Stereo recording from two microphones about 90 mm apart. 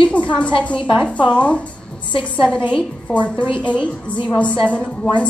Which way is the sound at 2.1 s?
70° left (ahead or behind).